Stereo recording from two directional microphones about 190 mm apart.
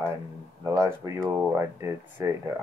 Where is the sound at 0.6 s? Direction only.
15° right (ahead or behind).